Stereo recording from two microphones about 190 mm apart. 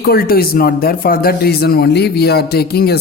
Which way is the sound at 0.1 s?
50° left (ahead or behind).